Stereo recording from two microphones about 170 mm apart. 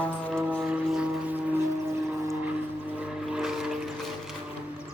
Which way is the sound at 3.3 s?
5° right (ahead or behind).